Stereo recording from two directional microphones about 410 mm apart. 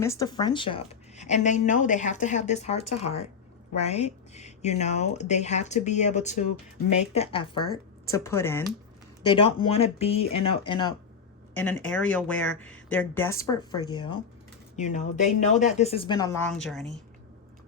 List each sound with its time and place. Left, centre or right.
0.0 s a woman's voice: centre